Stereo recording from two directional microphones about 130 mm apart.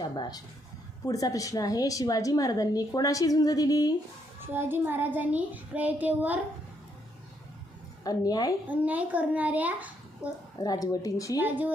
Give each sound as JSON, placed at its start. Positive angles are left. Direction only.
{"t": 0.0, "sound": "a woman's voice", "side_deg": 30}
{"t": 4.4, "sound": "a child's voice", "side_deg": -15}
{"t": 8.0, "sound": "a woman's voice", "side_deg": 30}
{"t": 8.6, "sound": "a child's voice", "side_deg": -10}
{"t": 10.6, "sound": "a woman's voice", "side_deg": 30}
{"t": 11.3, "sound": "a child's voice", "side_deg": -15}